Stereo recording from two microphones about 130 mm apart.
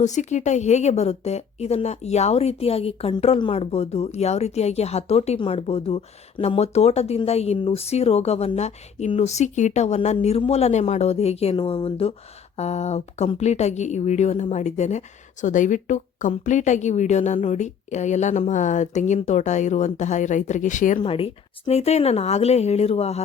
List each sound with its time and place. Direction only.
0.0 s a woman's voice: 65° left (ahead or behind); by 6.6 s 45° left (ahead or behind)
6.6 s a woman's voice: 55° left (ahead or behind)
11.5 s a woman's voice: 40° left (ahead or behind); by 21.0 s 75° left (ahead or behind)
21.0 s speech: 45° left (ahead or behind)